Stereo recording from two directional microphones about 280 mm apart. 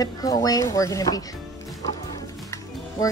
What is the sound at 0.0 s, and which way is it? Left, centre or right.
A woman's voice, centre.